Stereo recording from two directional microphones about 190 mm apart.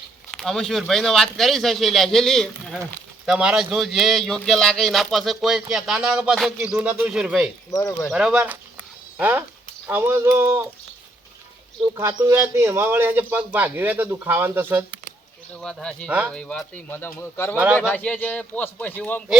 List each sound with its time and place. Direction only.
0.3 s speech: centre (ahead or behind)
7.7 s speech: 15° left (ahead or behind)
8.1 s speech: 5° right (ahead or behind)
11.9 s speech: 15° right (ahead or behind)
15.6 s speech: 5° left (ahead or behind)
16.0 s speech: 5° right (ahead or behind)
16.3 s speech: 5° left (ahead or behind)